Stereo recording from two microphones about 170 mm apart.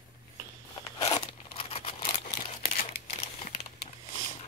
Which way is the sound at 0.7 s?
20° left (ahead or behind).